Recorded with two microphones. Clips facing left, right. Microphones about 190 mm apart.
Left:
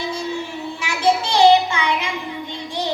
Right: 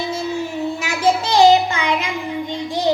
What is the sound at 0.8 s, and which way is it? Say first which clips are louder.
Child singing: left 1 dB; 40° right (ahead or behind).